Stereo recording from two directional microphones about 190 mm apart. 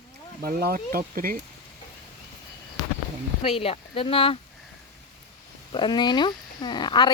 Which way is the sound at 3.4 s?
30° left (ahead or behind).